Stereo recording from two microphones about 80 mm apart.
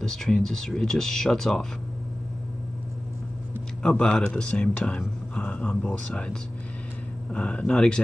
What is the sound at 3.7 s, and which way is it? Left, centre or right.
Speech, centre.